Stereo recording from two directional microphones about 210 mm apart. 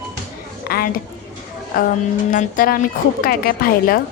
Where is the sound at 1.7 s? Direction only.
45° left (ahead or behind).